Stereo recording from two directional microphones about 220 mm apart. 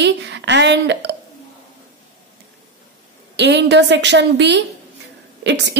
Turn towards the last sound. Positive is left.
turn(degrees=-50)  # may be behind; listen again after turning